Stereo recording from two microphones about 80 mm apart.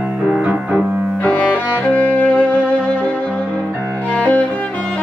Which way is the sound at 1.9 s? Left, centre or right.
Left.